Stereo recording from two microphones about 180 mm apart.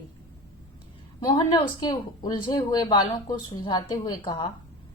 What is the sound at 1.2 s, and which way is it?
A woman's voice, 25° left (ahead or behind).